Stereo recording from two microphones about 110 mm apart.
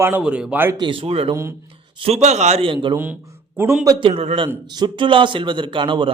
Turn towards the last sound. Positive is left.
turn(degrees=-50)  # may be behind; listen again after turning